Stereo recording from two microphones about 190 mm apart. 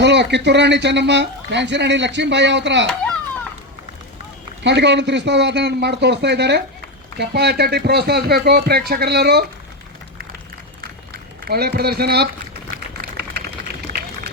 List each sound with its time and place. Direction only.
0.0 s speech: 65° right (ahead or behind)
4.6 s speech: 70° right (ahead or behind)
11.4 s a sound: 55° right (ahead or behind)